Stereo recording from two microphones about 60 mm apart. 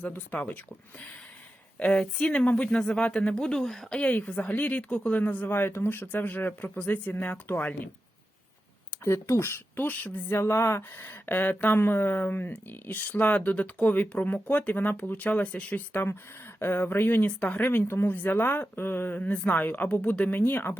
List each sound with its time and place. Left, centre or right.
0.0 s speech: left
1.8 s speech: centre
3.9 s speech: left
5.5 s speech: left
9.0 s speech: left
10.3 s speech: left
11.0 s speech: left
16.6 s speech: left
17.7 s speech: left